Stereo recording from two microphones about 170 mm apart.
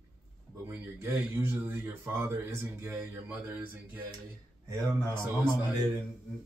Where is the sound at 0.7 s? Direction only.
15° right (ahead or behind).